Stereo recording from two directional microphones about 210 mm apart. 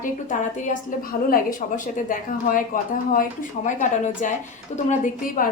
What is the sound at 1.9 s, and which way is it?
A woman's voice, 40° left (ahead or behind).